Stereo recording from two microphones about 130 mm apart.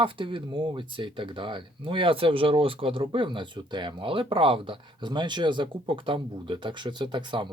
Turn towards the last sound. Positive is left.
turn(degrees=-35)  # may be behind; listen again after turning